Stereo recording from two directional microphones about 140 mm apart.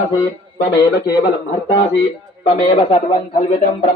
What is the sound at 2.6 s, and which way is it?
Speech, 40° left (ahead or behind).